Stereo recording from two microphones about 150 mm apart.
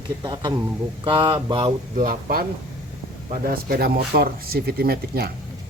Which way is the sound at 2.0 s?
70° right (ahead or behind).